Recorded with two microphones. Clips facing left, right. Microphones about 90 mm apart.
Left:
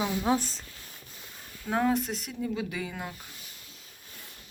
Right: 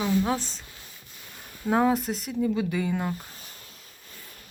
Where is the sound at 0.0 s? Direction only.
15° left (ahead or behind).